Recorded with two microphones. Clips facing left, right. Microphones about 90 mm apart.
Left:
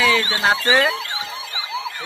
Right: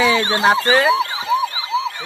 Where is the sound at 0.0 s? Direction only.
25° right (ahead or behind).